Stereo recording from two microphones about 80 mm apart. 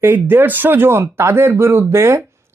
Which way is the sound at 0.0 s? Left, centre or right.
Right.